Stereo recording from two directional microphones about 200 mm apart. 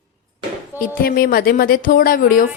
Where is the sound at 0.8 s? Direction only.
45° left (ahead or behind).